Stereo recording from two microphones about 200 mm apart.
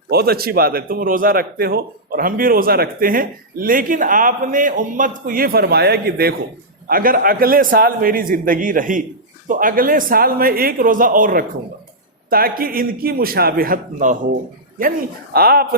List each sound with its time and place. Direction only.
0.1 s a man's voice: 50° right (ahead or behind)